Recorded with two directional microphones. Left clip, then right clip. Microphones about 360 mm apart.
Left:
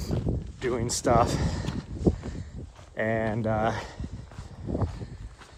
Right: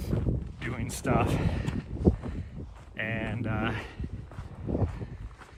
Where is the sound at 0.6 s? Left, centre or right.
Centre.